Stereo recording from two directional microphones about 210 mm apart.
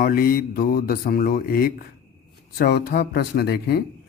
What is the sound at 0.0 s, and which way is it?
Speech, 45° left (ahead or behind).